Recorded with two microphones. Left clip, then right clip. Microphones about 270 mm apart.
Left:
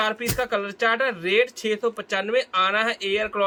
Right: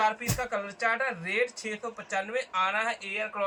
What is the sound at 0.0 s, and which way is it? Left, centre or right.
Speech, left.